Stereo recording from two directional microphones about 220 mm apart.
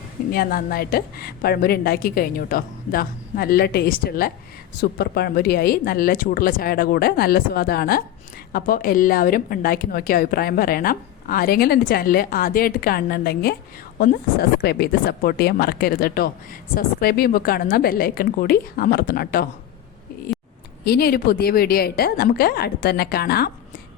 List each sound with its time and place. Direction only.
0.3 s a woman's voice: 45° left (ahead or behind)
20.8 s a woman's voice: 45° left (ahead or behind)